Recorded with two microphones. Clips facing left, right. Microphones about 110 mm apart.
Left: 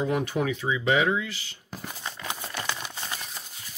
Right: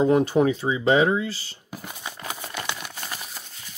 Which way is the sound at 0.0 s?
30° right (ahead or behind).